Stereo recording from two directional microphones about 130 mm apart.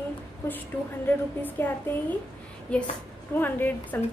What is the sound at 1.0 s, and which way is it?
A woman's voice, 15° left (ahead or behind).